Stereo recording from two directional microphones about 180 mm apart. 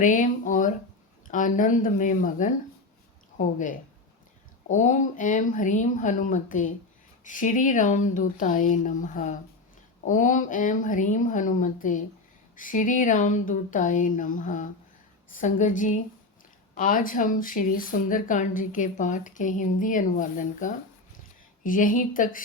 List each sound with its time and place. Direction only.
0.0 s a woman's voice: 45° left (ahead or behind)